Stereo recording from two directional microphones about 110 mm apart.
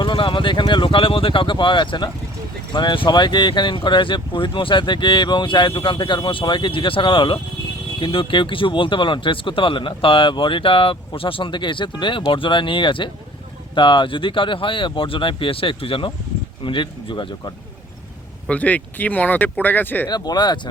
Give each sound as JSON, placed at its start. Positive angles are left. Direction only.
{"t": 0.0, "sound": "speech", "side_deg": 50}
{"t": 18.4, "sound": "speech", "side_deg": 15}
{"t": 20.1, "sound": "speech", "side_deg": 40}